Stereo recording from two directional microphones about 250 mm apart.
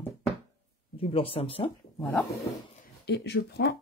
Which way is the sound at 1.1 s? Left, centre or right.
Left.